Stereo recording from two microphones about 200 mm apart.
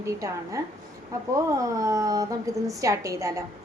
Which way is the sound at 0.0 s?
15° right (ahead or behind).